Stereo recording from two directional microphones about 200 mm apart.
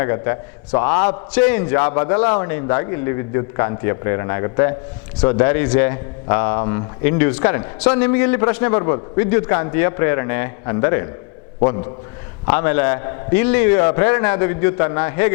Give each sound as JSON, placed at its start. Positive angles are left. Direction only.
{"t": 0.0, "sound": "a man's voice", "side_deg": 15}